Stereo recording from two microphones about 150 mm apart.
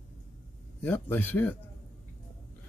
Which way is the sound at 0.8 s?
10° left (ahead or behind).